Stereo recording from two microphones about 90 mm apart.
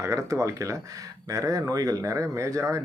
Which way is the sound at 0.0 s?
35° right (ahead or behind).